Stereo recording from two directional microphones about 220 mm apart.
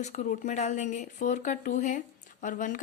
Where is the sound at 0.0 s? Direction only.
35° left (ahead or behind).